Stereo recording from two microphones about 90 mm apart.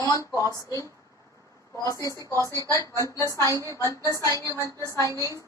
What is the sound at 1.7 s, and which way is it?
Speech, 35° left (ahead or behind).